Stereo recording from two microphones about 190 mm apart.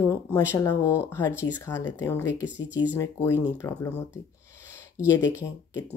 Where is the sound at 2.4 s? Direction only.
10° right (ahead or behind).